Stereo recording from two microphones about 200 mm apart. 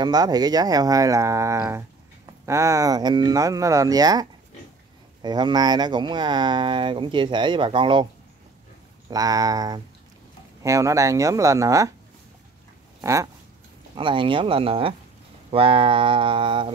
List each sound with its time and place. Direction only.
0.0 s speech: 20° right (ahead or behind)
9.1 s speech: 20° right (ahead or behind)
13.0 s speech: 15° right (ahead or behind)